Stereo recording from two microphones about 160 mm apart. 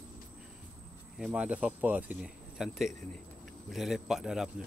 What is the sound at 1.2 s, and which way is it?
Speech, 5° right (ahead or behind).